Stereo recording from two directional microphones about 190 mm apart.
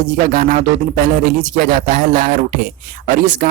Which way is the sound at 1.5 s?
45° right (ahead or behind).